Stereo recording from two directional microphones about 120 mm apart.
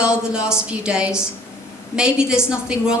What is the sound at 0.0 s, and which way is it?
A woman's voice, 5° right (ahead or behind).